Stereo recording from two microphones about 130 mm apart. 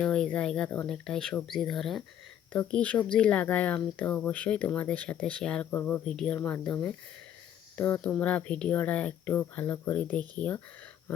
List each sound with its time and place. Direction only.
0.0 s speech: 10° left (ahead or behind)